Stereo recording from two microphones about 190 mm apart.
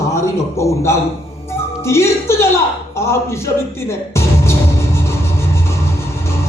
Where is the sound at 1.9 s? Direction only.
15° left (ahead or behind).